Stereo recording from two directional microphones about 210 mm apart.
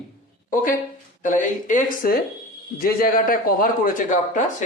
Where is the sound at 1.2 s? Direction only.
35° left (ahead or behind).